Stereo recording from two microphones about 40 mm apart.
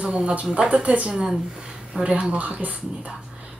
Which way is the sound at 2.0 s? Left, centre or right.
Right.